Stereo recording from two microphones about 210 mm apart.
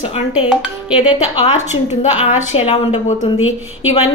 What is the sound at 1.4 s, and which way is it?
A woman's voice, 35° left (ahead or behind).